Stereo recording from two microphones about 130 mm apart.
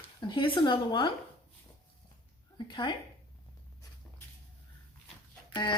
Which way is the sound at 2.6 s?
35° left (ahead or behind).